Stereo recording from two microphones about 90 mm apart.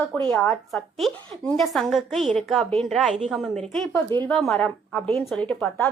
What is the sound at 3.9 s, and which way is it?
Speech, 25° left (ahead or behind).